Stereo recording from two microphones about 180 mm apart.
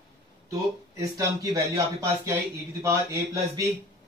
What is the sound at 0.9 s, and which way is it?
A man's voice, 20° right (ahead or behind).